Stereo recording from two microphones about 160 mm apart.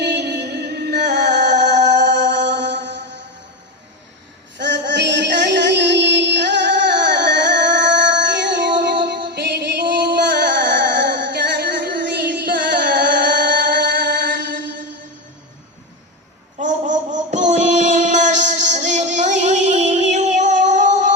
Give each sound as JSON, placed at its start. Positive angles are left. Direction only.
{"t": 0.0, "sound": "music", "side_deg": -90}
{"t": 1.7, "sound": "music", "side_deg": -45}
{"t": 2.2, "sound": "mantra", "side_deg": -90}
{"t": 4.5, "sound": "a sound", "side_deg": -90}
{"t": 16.6, "sound": "child singing", "side_deg": -50}
{"t": 19.1, "sound": "music", "side_deg": -50}